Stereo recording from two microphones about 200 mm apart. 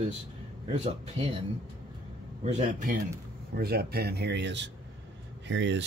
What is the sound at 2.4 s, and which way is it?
Speech, 35° right (ahead or behind).